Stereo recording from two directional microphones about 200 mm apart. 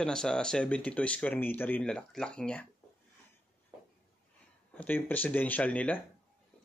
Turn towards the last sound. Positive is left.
turn(degrees=5)  # may be behind; listen again after turning